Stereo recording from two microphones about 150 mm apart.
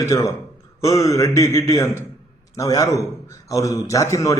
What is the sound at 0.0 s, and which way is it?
A man's voice, 20° left (ahead or behind).